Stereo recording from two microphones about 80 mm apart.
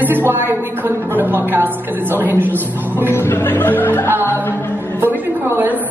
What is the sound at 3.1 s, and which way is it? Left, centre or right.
Speech, left.